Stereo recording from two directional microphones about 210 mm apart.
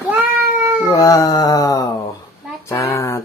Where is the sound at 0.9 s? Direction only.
15° left (ahead or behind).